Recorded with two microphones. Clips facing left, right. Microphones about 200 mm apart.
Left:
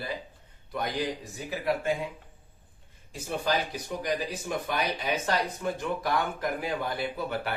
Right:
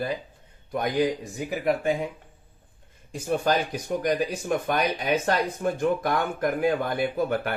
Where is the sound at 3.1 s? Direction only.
50° right (ahead or behind).